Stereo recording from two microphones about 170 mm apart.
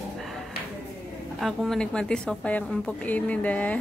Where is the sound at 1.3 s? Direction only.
Centre (ahead or behind).